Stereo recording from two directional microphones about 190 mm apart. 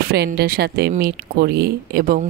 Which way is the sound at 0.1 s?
55° right (ahead or behind).